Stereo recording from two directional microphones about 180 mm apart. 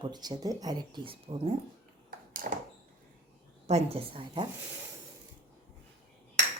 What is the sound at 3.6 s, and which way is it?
Speech, 35° right (ahead or behind).